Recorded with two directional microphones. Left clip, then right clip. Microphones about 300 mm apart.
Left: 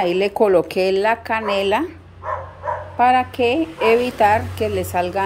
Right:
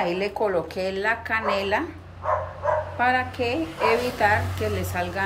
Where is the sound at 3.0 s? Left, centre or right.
Centre.